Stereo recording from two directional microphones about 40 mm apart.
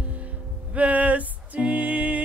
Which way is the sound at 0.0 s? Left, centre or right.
Right.